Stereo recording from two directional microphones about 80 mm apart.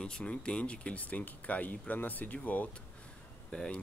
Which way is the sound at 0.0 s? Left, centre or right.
Centre.